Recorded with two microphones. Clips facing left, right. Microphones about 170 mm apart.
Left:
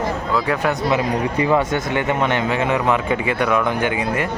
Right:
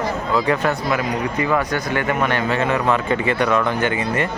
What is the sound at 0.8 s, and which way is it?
Speech, 25° left (ahead or behind).